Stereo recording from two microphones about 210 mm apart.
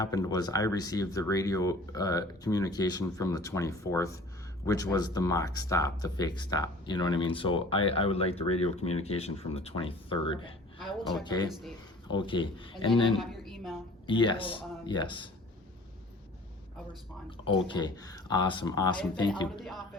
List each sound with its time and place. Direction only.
0.0 s speech: 15° left (ahead or behind)
10.8 s speech: centre (ahead or behind)
11.2 s speech: 20° left (ahead or behind)
13.1 s a sound: centre (ahead or behind)
14.1 s speech: 25° left (ahead or behind)
17.2 s speech: 25° left (ahead or behind)